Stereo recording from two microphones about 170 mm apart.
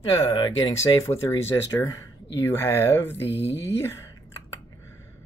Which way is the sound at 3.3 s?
90° left.